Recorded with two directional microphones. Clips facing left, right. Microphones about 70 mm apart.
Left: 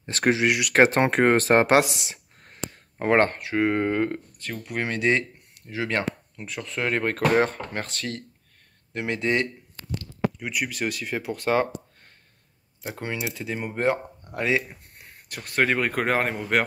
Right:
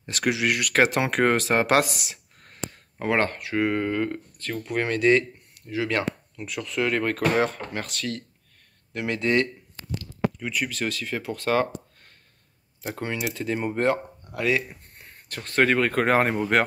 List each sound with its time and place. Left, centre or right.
0.1 s speech: left
0.5 s speech: centre
0.8 s speech: left
1.7 s a sound: left
3.0 s speech: left
4.4 s speech: centre
12.9 s speech: centre
14.7 s speech: centre
16.1 s speech: centre